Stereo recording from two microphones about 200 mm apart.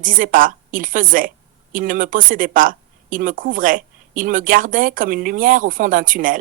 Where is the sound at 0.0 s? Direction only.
45° right (ahead or behind).